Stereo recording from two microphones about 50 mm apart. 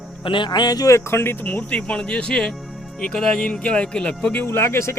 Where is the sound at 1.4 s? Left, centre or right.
Left.